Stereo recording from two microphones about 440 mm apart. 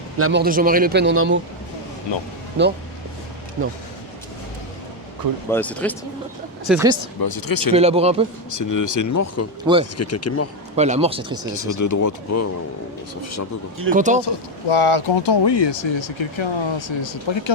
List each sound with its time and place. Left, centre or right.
0.2 s speech: right
2.6 s speech: right
5.5 s speech: centre
7.2 s speech: left
7.7 s speech: centre
8.4 s speech: left
10.8 s speech: centre
11.5 s speech: left
13.7 s speech: right
14.7 s speech: left